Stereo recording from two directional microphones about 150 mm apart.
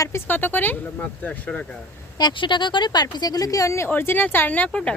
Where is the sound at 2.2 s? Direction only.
30° left (ahead or behind); by 5.0 s 5° left (ahead or behind).